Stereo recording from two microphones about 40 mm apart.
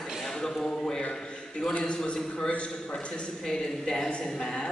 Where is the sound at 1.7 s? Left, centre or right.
Left.